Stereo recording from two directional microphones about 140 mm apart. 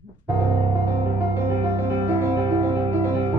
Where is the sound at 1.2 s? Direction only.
15° right (ahead or behind).